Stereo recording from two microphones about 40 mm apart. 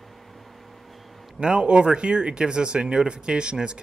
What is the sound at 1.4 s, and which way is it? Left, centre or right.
Speech, right.